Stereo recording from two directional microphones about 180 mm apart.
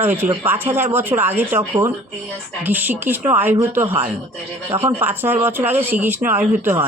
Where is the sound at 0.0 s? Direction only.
10° right (ahead or behind).